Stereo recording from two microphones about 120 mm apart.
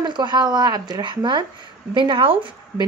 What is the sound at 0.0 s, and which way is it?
A woman's voice, 40° right (ahead or behind).